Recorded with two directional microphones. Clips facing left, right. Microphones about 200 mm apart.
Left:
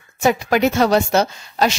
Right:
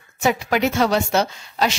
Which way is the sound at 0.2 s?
45° left (ahead or behind).